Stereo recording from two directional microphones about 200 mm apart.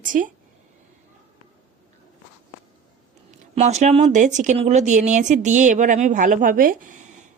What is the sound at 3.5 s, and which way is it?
Speech, 35° right (ahead or behind).